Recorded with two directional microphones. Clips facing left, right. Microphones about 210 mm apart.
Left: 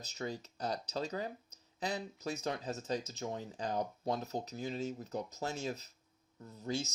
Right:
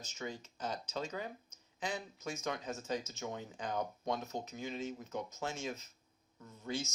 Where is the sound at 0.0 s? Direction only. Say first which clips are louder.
Left 3 dB; 35° left (ahead or behind).